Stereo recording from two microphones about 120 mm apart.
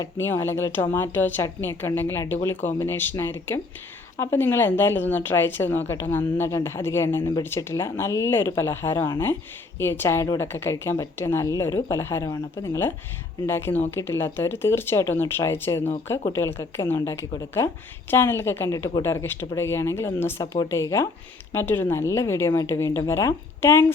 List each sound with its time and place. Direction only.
0.2 s speech: 20° left (ahead or behind)